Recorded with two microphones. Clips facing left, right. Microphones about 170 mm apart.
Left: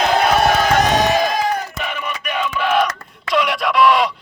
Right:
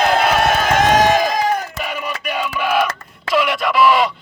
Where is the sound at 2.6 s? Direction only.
5° right (ahead or behind).